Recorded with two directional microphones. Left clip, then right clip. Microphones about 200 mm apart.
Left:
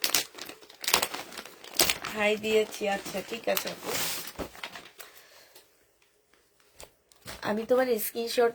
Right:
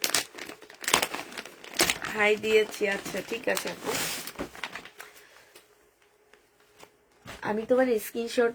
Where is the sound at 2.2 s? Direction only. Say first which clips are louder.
Right 2 dB; 30° right (ahead or behind).